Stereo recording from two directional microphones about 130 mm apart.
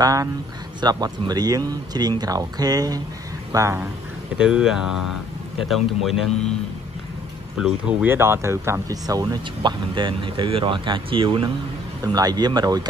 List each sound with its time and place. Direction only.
0.0 s speech: 25° right (ahead or behind)
4.4 s speech: 5° right (ahead or behind)
7.5 s speech: 5° right (ahead or behind)
8.1 s speech: 20° right (ahead or behind); by 11.5 s 40° right (ahead or behind)
12.0 s speech: 30° right (ahead or behind)